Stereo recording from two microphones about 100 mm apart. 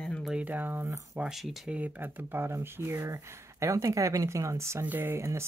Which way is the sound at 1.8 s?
20° right (ahead or behind).